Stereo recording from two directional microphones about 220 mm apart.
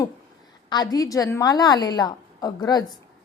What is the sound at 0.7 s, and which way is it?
A woman's voice, 15° left (ahead or behind).